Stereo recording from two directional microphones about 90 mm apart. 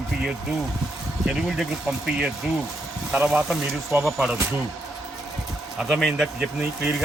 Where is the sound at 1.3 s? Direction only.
10° right (ahead or behind).